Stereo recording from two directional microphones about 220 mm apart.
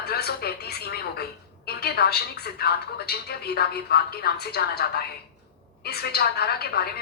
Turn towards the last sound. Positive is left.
turn(degrees=45)  # may be behind; listen again after turning